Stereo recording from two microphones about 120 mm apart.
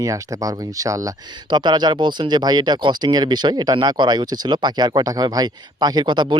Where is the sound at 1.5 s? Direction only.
40° right (ahead or behind).